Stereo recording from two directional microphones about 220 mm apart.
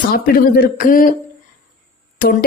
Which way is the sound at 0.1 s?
40° left (ahead or behind).